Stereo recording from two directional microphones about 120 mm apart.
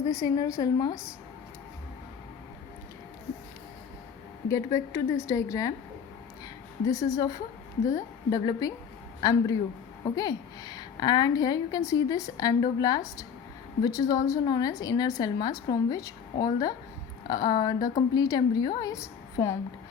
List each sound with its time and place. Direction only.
0.0 s a woman's voice: 30° left (ahead or behind)
4.4 s a woman's voice: 25° left (ahead or behind)
6.8 s a woman's voice: 30° left (ahead or behind)
10.0 s a woman's voice: 30° left (ahead or behind)